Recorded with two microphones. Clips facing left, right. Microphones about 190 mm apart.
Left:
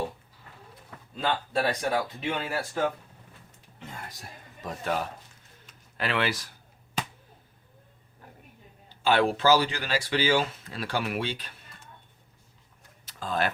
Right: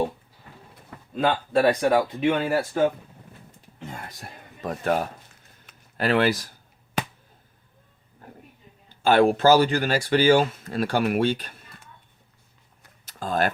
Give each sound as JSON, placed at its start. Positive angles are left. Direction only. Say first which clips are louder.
{"t": 1.1, "sound": "speech", "louder": "right 6 dB", "side_deg": -55}
{"t": 4.2, "sound": "speech", "louder": "right 6 dB", "side_deg": -55}
{"t": 9.0, "sound": "speech", "louder": "right 5 dB", "side_deg": -50}
{"t": 13.1, "sound": "a sound", "louder": "right 4 dB", "side_deg": -45}